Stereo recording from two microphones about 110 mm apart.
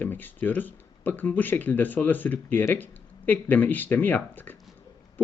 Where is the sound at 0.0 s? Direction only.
15° left (ahead or behind).